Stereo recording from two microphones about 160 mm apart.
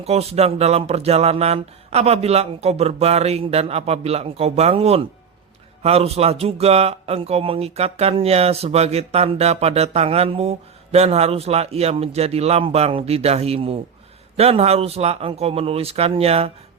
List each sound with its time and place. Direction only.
0.0 s speech: 40° right (ahead or behind)